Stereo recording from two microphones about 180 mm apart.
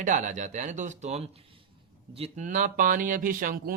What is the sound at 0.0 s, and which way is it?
Speech, 45° right (ahead or behind).